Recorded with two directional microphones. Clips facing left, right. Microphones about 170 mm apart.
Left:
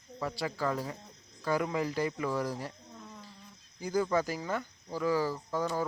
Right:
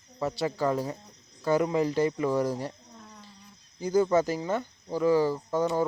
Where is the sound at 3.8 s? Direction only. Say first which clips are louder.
Right 6 dB; 25° right (ahead or behind).